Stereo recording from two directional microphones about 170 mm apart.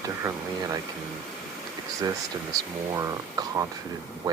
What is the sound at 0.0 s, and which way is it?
Speech, 20° right (ahead or behind).